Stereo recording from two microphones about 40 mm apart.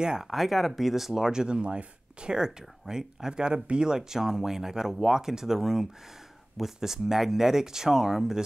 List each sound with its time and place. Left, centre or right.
0.0 s speech: centre
0.3 s speech: centre